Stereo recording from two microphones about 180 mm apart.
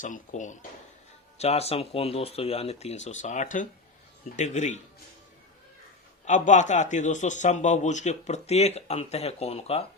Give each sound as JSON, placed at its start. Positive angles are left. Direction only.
{"t": 0.0, "sound": "a man's voice", "side_deg": 45}
{"t": 6.2, "sound": "a man's voice", "side_deg": 45}